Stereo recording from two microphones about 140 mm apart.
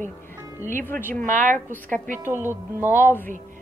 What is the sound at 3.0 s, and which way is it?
Speech, 15° left (ahead or behind).